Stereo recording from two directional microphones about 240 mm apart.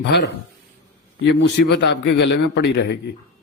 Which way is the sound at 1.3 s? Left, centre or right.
Left.